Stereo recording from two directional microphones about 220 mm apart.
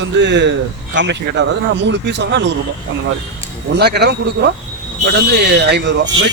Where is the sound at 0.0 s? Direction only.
55° right (ahead or behind).